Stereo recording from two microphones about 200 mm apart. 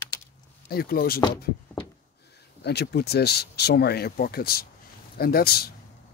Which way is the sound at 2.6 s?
55° left (ahead or behind).